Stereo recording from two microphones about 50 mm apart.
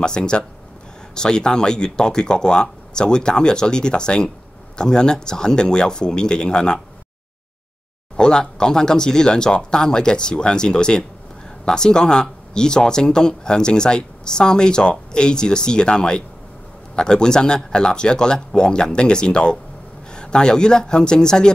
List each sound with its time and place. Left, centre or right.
0.0 s speech: centre
8.2 s speech: centre